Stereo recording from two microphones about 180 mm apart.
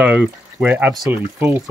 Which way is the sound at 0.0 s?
5° right (ahead or behind).